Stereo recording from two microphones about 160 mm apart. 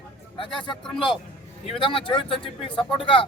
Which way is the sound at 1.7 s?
35° left (ahead or behind).